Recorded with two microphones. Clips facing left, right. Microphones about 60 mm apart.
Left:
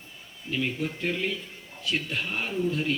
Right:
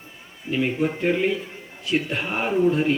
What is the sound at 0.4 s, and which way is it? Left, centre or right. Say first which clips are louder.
A man's voice: right 7 dB; right.